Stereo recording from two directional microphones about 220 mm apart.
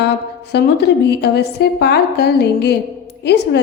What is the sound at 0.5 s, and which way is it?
A woman's voice, 50° left (ahead or behind).